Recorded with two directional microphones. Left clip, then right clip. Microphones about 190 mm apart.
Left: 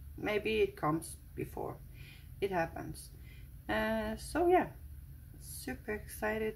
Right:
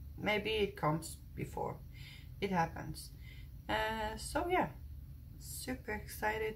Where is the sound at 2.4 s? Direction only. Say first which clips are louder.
Left 1 dB; 35° left (ahead or behind).